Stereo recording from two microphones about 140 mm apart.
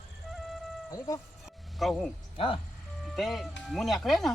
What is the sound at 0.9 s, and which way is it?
Speech, 25° left (ahead or behind).